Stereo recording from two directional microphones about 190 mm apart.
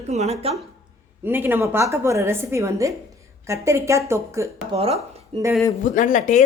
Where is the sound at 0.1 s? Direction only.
35° right (ahead or behind).